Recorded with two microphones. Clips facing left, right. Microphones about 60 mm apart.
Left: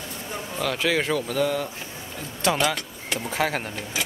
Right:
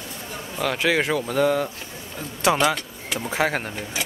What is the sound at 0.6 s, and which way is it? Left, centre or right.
Speech, centre.